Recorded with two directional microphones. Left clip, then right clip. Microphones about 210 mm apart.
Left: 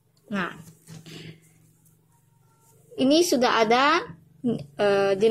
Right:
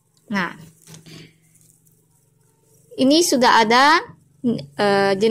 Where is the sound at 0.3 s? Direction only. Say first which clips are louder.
Right 6 dB; 20° right (ahead or behind).